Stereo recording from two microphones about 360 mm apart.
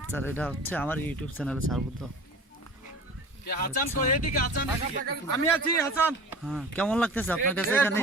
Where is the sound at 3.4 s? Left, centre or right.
Left.